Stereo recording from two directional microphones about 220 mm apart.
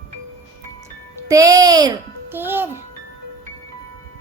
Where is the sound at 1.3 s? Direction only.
15° right (ahead or behind).